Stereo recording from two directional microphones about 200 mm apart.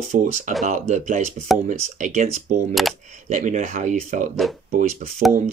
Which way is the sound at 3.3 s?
40° right (ahead or behind).